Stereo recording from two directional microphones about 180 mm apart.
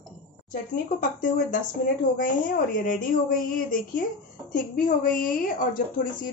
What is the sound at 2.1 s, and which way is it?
Speech, 50° left (ahead or behind).